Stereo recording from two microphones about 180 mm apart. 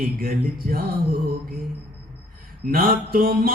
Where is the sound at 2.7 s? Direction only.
55° right (ahead or behind).